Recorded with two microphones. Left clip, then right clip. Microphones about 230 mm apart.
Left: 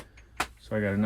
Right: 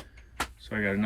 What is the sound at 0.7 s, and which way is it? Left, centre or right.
Speech, centre.